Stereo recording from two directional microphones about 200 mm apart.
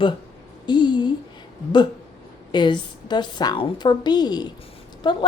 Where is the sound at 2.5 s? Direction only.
20° left (ahead or behind).